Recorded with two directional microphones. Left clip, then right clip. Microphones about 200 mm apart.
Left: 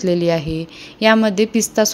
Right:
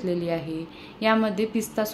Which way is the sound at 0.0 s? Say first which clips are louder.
Left 10 dB; 50° left (ahead or behind).